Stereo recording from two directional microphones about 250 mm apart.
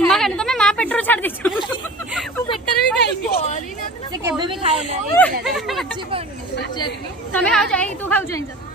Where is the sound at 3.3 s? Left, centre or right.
Left.